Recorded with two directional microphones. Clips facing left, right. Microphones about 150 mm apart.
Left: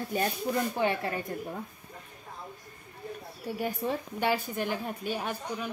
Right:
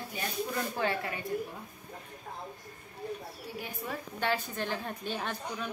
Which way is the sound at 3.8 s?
30° left (ahead or behind).